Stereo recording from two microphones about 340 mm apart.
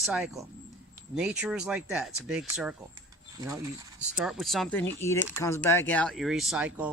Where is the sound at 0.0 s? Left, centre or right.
Centre.